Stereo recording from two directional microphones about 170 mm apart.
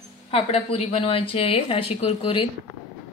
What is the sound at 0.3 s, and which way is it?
A woman's voice, 35° left (ahead or behind).